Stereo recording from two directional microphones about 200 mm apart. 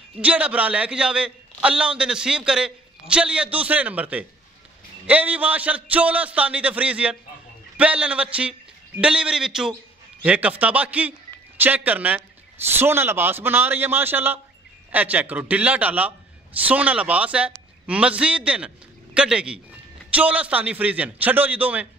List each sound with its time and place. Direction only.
0.2 s a man's voice: 5° right (ahead or behind)